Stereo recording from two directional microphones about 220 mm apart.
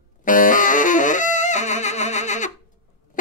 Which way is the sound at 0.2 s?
35° left (ahead or behind).